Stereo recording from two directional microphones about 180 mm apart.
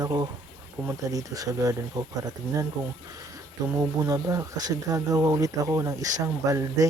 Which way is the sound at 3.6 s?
20° right (ahead or behind).